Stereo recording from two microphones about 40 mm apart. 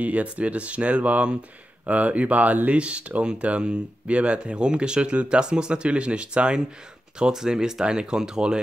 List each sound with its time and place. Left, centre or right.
0.0 s speech: right
2.8 s speech: right